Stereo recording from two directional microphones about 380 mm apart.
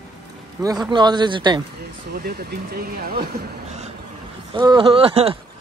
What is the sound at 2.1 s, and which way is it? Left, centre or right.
Speech, right.